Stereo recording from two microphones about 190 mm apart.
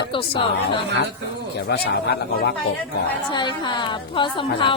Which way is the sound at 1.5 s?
60° left (ahead or behind).